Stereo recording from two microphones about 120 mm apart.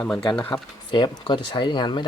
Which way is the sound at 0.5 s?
25° left (ahead or behind).